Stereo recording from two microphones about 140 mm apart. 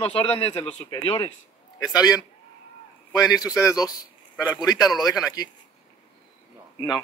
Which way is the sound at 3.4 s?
25° left (ahead or behind).